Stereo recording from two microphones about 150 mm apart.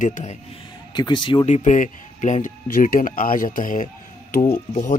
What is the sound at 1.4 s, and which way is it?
Speech, 55° left (ahead or behind).